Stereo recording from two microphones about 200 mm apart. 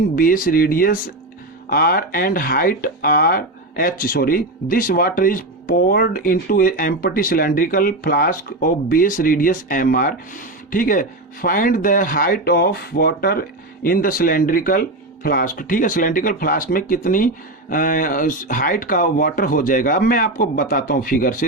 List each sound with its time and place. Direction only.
0.2 s speech: 45° left (ahead or behind)